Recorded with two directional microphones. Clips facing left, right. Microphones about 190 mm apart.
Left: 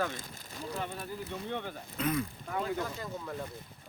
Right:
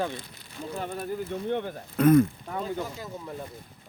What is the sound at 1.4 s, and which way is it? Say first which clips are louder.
Speech: right 8 dB; 55° right (ahead or behind).